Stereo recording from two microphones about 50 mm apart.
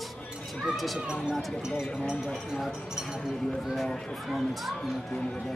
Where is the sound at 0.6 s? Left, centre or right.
Centre.